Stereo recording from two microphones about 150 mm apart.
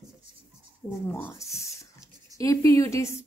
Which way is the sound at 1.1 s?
15° left (ahead or behind).